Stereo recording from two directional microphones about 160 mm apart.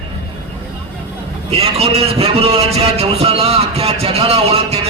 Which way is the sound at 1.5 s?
40° right (ahead or behind).